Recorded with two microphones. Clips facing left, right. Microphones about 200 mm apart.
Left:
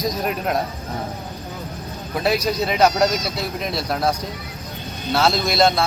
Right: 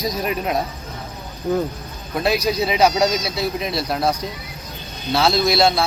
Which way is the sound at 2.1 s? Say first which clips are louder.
Right 1 dB; centre (ahead or behind).